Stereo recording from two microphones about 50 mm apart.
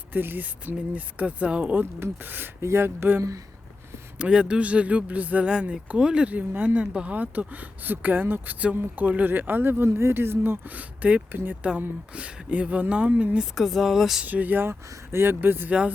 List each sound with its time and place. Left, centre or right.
0.1 s speech: right
1.7 s speech: right
2.6 s speech: right
3.2 s speech: right
4.2 s speech: centre
5.5 s speech: centre
6.3 s speech: right
6.7 s speech: right
11.3 s speech: right
12.1 s speech: right
13.4 s speech: centre
14.3 s speech: right
14.7 s speech: right